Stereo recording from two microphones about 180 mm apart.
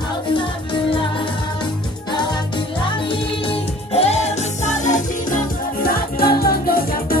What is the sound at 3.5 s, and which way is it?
Music, 35° left (ahead or behind).